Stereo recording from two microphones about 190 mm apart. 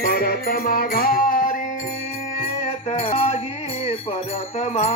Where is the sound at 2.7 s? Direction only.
30° left (ahead or behind).